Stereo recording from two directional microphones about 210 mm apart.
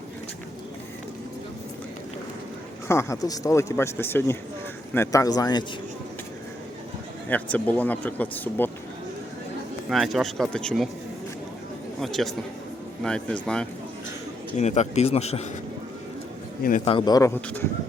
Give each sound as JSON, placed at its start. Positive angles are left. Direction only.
{"t": 2.8, "sound": "speech", "side_deg": 15}
{"t": 7.3, "sound": "speech", "side_deg": 5}
{"t": 9.9, "sound": "speech", "side_deg": 0}
{"t": 11.9, "sound": "speech", "side_deg": 0}
{"t": 14.5, "sound": "speech", "side_deg": 35}
{"t": 16.8, "sound": "speech", "side_deg": 20}